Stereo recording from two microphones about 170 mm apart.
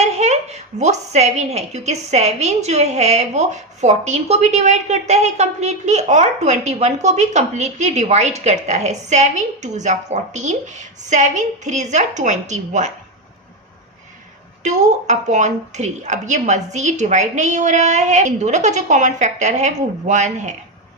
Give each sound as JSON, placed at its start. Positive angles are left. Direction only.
{"t": 0.0, "sound": "a woman's voice", "side_deg": -40}
{"t": 14.6, "sound": "a woman's voice", "side_deg": -45}